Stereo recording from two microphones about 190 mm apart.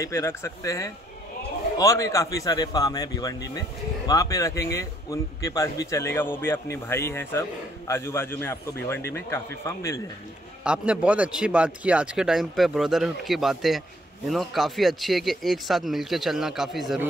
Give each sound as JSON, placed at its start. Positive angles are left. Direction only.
{"t": 0.0, "sound": "a man's voice", "side_deg": 15}
{"t": 10.6, "sound": "speech", "side_deg": -5}